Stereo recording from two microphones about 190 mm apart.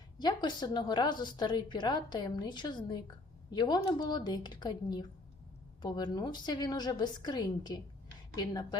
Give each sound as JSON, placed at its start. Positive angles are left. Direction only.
{"t": 0.2, "sound": "a woman's voice", "side_deg": 20}